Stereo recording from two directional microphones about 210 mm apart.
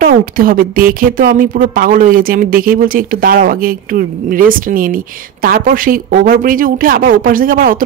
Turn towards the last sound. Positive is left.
turn(degrees=-40)  # may be behind; listen again after turning